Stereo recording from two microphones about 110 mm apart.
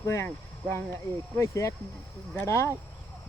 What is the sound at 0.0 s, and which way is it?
Speech, 25° left (ahead or behind).